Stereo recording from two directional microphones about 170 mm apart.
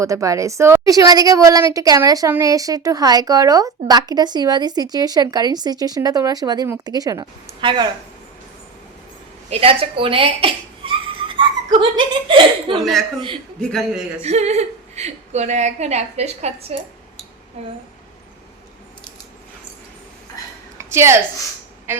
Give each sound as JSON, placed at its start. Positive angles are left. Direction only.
{"t": 0.0, "sound": "speech", "side_deg": -20}
{"t": 9.5, "sound": "a woman's voice", "side_deg": -35}
{"t": 12.7, "sound": "a man's voice", "side_deg": 0}
{"t": 14.2, "sound": "a woman's voice", "side_deg": -40}
{"t": 20.7, "sound": "a sound", "side_deg": -15}
{"t": 21.9, "sound": "a woman's voice", "side_deg": -10}